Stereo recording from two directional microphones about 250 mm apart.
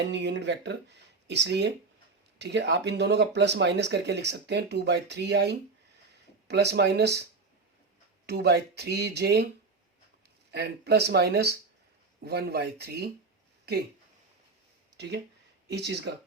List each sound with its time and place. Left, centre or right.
0.1 s speech: right
8.3 s speech: right
10.5 s speech: right